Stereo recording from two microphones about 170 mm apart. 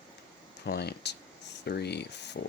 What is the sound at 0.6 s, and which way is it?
Speech, 70° left (ahead or behind).